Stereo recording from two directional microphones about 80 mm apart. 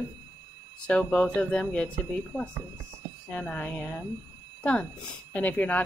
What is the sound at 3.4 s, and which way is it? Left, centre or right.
A woman's voice, centre.